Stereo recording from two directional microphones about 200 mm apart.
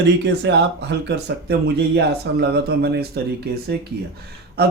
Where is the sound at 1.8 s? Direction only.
55° right (ahead or behind).